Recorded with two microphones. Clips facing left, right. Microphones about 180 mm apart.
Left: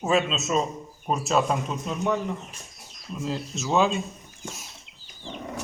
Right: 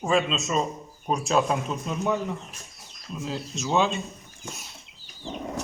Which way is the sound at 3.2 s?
Centre (ahead or behind).